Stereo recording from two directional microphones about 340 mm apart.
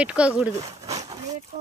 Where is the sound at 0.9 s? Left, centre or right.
Centre.